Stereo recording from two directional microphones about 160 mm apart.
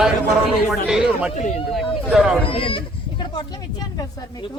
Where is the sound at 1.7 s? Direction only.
5° right (ahead or behind).